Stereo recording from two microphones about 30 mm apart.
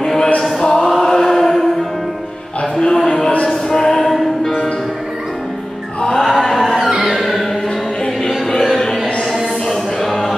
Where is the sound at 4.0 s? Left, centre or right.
Centre.